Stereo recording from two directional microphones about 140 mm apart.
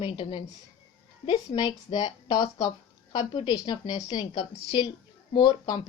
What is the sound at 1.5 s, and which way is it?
A woman's voice, 30° left (ahead or behind).